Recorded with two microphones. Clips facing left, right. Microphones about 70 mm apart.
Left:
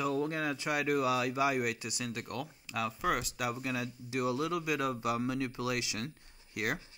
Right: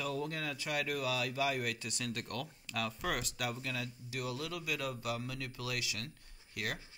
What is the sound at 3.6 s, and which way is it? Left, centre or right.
Speech, left.